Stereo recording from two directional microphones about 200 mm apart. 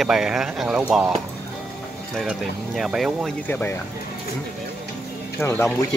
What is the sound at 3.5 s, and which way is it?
Speech, 10° left (ahead or behind).